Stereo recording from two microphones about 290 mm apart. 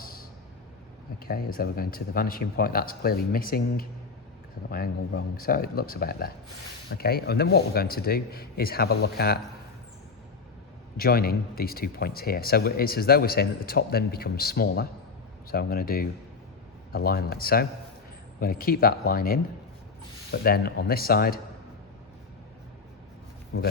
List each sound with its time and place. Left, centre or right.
0.0 s vehicle: left
1.2 s speech: left
10.9 s speech: left